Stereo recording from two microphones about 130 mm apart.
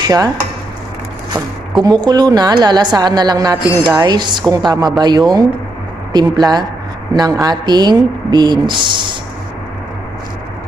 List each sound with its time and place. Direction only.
0.0 s stir: 30° right (ahead or behind)
1.3 s speech: 30° right (ahead or behind)